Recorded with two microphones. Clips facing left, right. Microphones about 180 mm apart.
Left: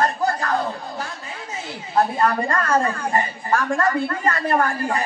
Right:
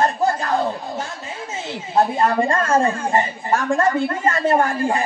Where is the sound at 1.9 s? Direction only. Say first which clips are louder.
Right 2 dB; 25° right (ahead or behind).